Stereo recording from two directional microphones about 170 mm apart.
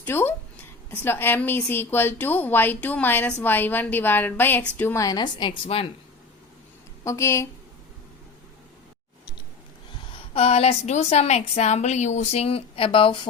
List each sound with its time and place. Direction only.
0.0 s a woman's voice: 15° left (ahead or behind)
5.0 s a woman's voice: 25° left (ahead or behind)
7.0 s a woman's voice: 15° left (ahead or behind)
10.1 s a woman's voice: 35° left (ahead or behind)